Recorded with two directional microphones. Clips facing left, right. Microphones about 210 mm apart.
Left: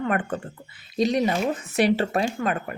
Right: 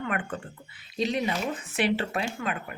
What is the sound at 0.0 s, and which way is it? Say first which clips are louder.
Speech: left 6 dB; 40° left (ahead or behind).